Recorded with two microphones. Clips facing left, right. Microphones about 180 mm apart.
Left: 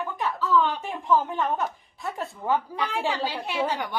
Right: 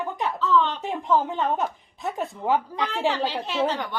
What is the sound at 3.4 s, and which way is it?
Speech, 10° left (ahead or behind).